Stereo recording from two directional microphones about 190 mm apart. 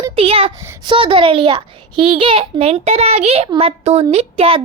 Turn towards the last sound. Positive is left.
turn(degrees=-30)  # may be behind; listen again after turning